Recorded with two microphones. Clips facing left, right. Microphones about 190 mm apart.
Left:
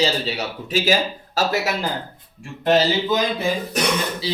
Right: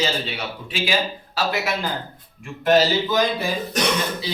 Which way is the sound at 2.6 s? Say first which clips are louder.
Even; 20° left (ahead or behind).